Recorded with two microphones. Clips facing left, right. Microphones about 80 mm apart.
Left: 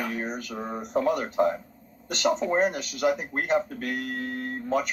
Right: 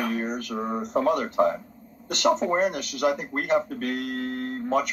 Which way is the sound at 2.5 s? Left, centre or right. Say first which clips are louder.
Even; centre.